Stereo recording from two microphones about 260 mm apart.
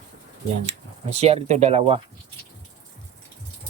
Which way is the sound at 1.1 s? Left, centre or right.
Right.